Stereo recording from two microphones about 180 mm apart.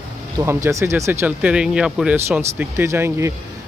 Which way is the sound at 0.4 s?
15° right (ahead or behind).